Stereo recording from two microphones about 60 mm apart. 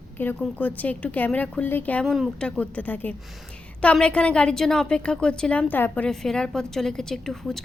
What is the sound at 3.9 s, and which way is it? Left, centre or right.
A woman's voice, centre.